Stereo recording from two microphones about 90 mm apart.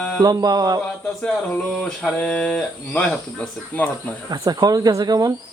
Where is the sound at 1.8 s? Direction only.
5° left (ahead or behind).